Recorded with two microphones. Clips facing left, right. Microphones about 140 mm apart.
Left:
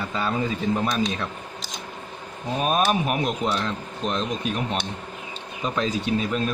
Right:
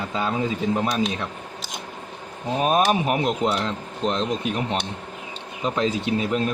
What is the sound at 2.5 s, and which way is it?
A man's voice, 20° right (ahead or behind).